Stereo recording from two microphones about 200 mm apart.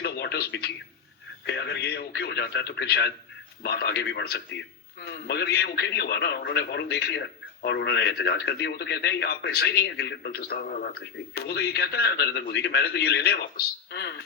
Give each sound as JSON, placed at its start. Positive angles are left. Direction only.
{"t": 0.0, "sound": "radio", "side_deg": 55}
{"t": 1.5, "sound": "a man's voice", "side_deg": 60}